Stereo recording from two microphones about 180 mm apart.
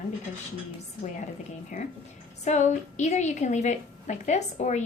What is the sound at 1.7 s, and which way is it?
A woman's voice, 45° left (ahead or behind).